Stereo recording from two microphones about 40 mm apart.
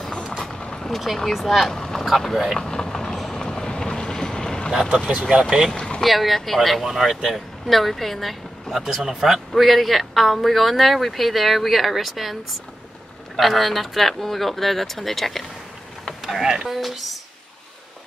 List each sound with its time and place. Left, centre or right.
0.4 s vehicle: left
0.8 s speech: centre
2.6 s vehicle: centre
5.3 s speech: centre
5.7 s boat: left
6.0 s speech: centre
13.4 s speech: centre
16.2 s speech: centre